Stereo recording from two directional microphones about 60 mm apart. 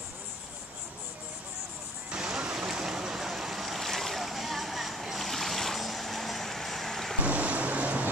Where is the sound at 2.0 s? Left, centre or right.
Centre.